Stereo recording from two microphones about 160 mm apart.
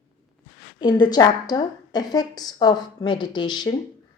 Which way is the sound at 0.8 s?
30° left (ahead or behind).